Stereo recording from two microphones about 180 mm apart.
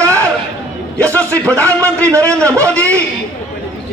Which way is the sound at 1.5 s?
15° right (ahead or behind).